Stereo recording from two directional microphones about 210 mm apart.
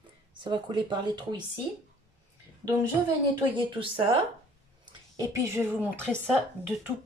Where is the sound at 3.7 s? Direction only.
25° right (ahead or behind).